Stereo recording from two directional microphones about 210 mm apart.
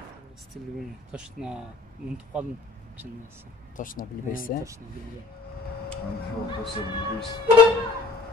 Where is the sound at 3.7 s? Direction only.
40° left (ahead or behind).